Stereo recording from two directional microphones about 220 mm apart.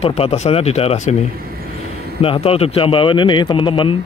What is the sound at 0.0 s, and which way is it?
Speech, 25° left (ahead or behind).